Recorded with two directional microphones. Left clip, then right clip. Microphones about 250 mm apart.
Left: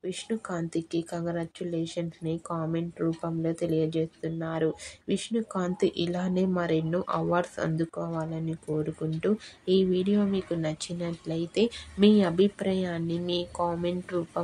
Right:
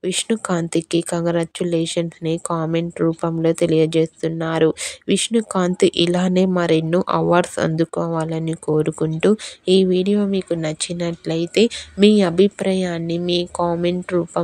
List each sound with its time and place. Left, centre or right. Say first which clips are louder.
0.0 s speech: right 12 dB; right